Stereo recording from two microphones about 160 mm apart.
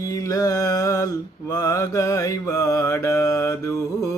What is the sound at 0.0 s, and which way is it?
Mantra, 20° left (ahead or behind).